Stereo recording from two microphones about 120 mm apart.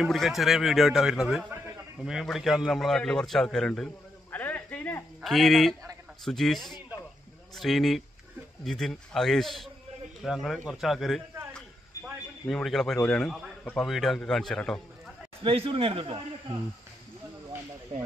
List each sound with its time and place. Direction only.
0.0 s a man's voice: centre (ahead or behind)
4.4 s cricket: 15° left (ahead or behind)
5.2 s a man's voice: centre (ahead or behind)
12.4 s a man's voice: 5° left (ahead or behind)
15.4 s speech: 50° right (ahead or behind)
17.9 s speech: 55° right (ahead or behind)